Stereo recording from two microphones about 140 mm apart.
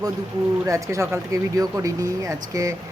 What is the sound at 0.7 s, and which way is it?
Speech, 20° right (ahead or behind).